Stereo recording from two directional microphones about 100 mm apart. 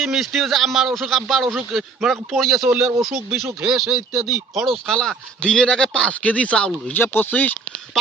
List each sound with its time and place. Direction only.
0.0 s a man's voice: centre (ahead or behind)
7.0 s speech: 20° left (ahead or behind)